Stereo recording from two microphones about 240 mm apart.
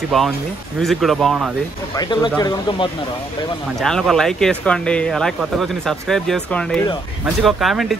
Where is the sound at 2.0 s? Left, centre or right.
Centre.